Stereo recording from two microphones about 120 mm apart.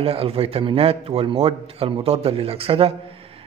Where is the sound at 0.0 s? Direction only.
55° right (ahead or behind).